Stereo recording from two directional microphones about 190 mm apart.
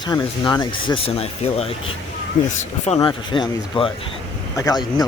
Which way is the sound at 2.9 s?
25° left (ahead or behind).